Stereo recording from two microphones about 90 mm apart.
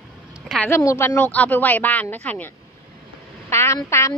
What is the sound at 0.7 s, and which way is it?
A woman's voice, 30° left (ahead or behind).